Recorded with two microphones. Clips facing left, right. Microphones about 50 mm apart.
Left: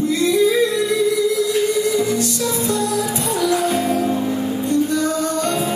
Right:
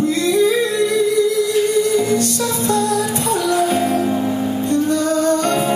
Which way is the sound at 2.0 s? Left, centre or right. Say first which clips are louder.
Right 2 dB; right.